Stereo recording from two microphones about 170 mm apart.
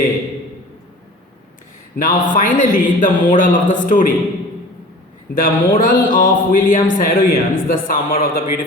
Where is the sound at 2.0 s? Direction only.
50° left (ahead or behind).